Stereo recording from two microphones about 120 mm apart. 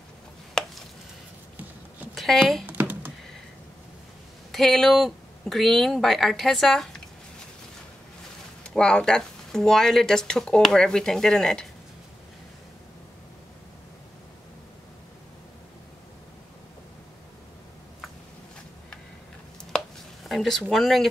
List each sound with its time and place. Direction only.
2.1 s speech: centre (ahead or behind)
2.6 s computer keyboard: 15° right (ahead or behind)
4.5 s speech: centre (ahead or behind)
8.6 s speech: 5° left (ahead or behind)
20.2 s a sound: centre (ahead or behind)
20.7 s speech: centre (ahead or behind)